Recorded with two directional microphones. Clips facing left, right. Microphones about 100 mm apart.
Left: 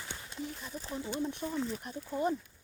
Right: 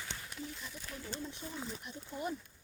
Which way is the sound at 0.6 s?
35° left (ahead or behind).